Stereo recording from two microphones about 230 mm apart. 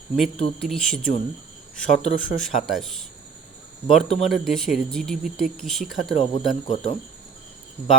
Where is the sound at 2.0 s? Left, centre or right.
Centre.